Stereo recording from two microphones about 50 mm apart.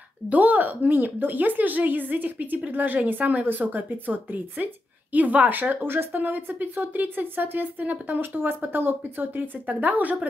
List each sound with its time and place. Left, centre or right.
0.3 s speech: right